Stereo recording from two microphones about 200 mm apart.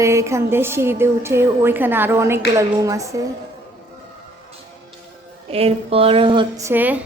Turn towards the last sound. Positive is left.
turn(degrees=-10)  # may be behind; listen again after turning